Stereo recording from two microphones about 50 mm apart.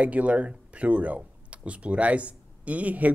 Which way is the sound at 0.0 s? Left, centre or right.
Right.